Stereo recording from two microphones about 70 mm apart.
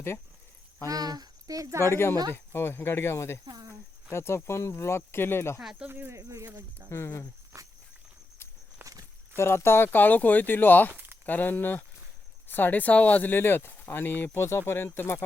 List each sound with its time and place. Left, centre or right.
0.9 s speech: right
1.8 s speech: left
3.4 s speech: right
4.1 s speech: left
5.9 s speech: right
6.1 s speech: right
6.9 s speech: left
7.5 s walk: right
8.8 s walk: right
9.3 s speech: left
10.9 s a sound: right
11.3 s speech: left